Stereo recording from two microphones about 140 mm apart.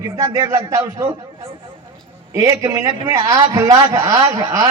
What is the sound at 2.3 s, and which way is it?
A man's voice, 20° right (ahead or behind).